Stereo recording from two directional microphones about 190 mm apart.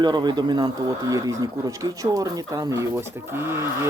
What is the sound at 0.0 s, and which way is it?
Speech, 20° right (ahead or behind).